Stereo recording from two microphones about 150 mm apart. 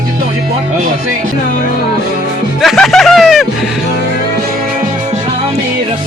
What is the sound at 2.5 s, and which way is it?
Music, centre (ahead or behind).